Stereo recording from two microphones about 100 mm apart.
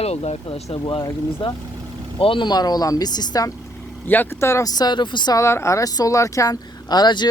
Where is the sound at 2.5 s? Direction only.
40° left (ahead or behind).